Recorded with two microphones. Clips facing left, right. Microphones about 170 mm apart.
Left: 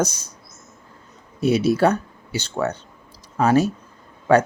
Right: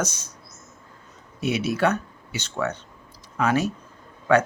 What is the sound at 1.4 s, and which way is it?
Speech, 35° left (ahead or behind).